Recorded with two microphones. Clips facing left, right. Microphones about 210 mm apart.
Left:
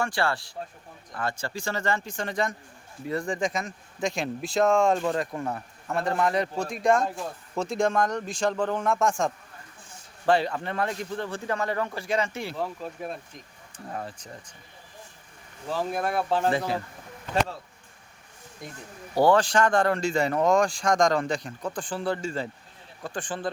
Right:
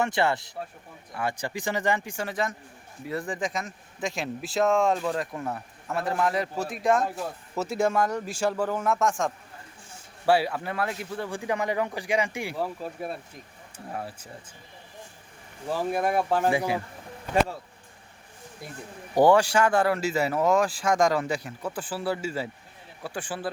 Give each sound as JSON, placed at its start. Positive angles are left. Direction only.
{"t": 0.0, "sound": "speech", "side_deg": -20}
{"t": 15.7, "sound": "speech", "side_deg": -10}
{"t": 18.6, "sound": "speech", "side_deg": -5}